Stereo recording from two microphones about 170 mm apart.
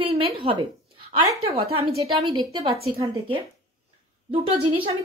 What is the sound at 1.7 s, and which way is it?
A woman's voice, 30° right (ahead or behind).